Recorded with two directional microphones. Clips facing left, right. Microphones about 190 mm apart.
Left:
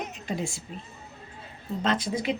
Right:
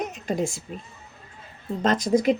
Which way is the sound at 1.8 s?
45° right (ahead or behind).